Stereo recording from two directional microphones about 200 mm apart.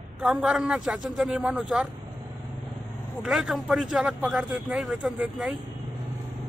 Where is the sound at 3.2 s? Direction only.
Centre (ahead or behind).